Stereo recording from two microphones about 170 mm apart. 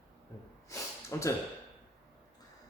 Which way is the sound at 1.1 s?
15° left (ahead or behind).